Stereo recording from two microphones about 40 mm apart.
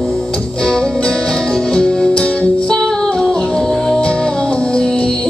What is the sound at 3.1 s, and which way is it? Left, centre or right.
Music, centre.